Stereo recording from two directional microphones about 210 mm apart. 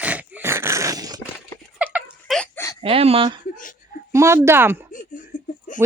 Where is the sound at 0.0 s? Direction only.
5° right (ahead or behind).